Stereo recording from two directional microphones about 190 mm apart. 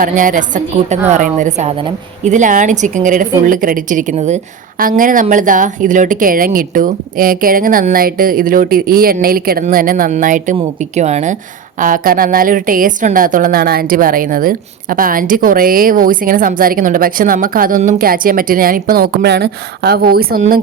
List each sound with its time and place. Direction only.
0.0 s a woman's voice: 45° right (ahead or behind)